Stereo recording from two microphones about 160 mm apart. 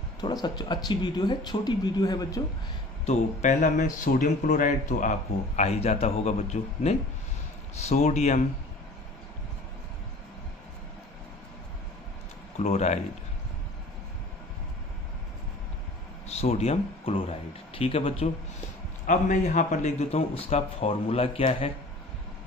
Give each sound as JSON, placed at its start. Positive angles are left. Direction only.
{"t": 0.2, "sound": "speech", "side_deg": 25}
{"t": 3.1, "sound": "speech", "side_deg": 50}
{"t": 12.5, "sound": "speech", "side_deg": 45}
{"t": 16.3, "sound": "a man's voice", "side_deg": 45}